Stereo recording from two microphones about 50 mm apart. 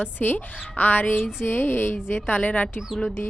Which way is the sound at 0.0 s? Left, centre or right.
Left.